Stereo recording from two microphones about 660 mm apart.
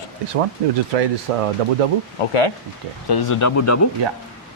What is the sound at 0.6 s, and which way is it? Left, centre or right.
Speech, right.